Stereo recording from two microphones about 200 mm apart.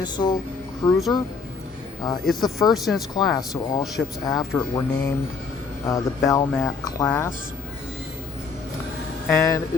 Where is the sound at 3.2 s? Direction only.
20° left (ahead or behind).